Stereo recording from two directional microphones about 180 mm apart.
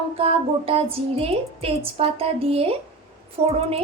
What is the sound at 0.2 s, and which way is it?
A woman's voice, 35° right (ahead or behind).